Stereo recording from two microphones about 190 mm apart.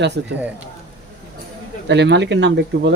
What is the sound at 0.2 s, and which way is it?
Speech, 65° right (ahead or behind).